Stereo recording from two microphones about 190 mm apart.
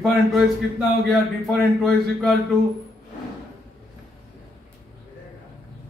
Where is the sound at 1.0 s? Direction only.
Centre (ahead or behind).